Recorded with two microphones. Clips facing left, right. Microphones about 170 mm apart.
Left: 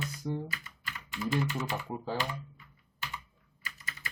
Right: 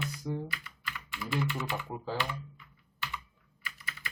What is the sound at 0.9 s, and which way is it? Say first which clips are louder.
Typing: left 3 dB; 35° left (ahead or behind).